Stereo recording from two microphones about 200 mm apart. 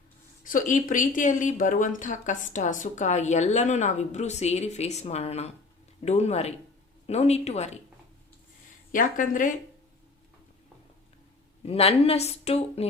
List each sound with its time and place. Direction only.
0.4 s speech: 40° left (ahead or behind)
8.9 s speech: 40° left (ahead or behind)
11.6 s speech: 30° left (ahead or behind)